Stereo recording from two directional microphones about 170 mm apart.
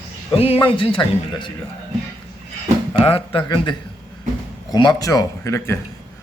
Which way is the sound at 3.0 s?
35° left (ahead or behind).